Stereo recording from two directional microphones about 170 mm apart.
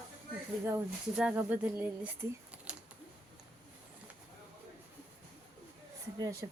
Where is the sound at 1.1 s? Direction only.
5° right (ahead or behind).